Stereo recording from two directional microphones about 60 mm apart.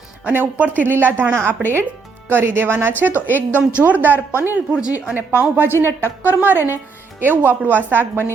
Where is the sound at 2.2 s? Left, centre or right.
Right.